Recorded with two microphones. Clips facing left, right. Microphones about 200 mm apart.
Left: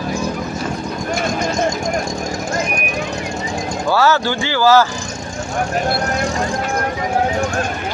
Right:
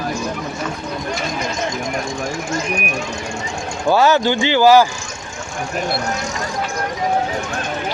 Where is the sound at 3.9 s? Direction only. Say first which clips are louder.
Right 2 dB; 20° right (ahead or behind).